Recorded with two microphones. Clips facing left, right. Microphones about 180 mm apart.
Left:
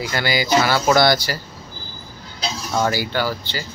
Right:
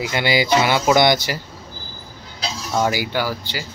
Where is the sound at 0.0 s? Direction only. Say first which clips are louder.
Right 2 dB; 20° right (ahead or behind).